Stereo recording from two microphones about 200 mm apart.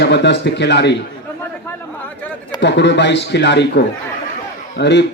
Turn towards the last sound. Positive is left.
turn(degrees=55)  # may be behind; listen again after turning